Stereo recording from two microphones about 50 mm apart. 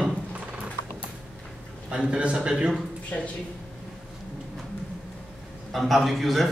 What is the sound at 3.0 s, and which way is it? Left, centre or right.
Speech, left.